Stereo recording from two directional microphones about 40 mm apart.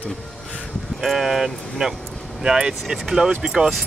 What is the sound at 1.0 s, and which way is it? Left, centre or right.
Speech, centre.